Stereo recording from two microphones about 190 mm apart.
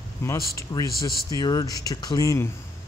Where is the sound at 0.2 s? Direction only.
15° left (ahead or behind).